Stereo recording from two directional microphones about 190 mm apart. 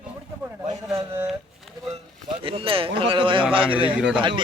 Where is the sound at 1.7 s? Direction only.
Centre (ahead or behind).